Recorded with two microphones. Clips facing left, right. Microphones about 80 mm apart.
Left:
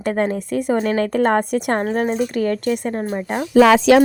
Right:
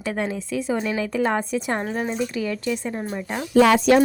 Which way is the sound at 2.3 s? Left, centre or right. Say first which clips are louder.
Left 6 dB; left.